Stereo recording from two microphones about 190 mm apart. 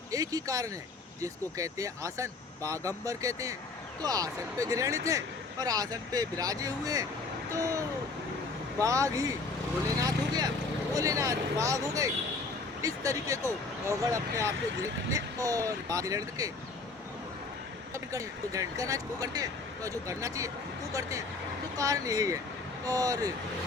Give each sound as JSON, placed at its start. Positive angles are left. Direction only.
{"t": 0.1, "sound": "speech", "side_deg": -20}
{"t": 17.9, "sound": "speech", "side_deg": -15}
{"t": 21.8, "sound": "speech", "side_deg": -20}